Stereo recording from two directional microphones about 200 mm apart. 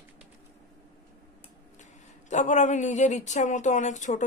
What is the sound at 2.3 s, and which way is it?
Speech, 35° left (ahead or behind).